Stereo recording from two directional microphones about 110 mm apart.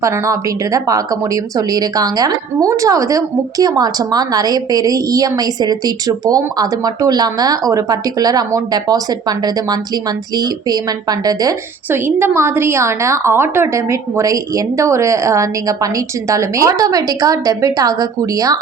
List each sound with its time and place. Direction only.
0.0 s speech: 30° right (ahead or behind)
11.9 s a woman's voice: 20° right (ahead or behind)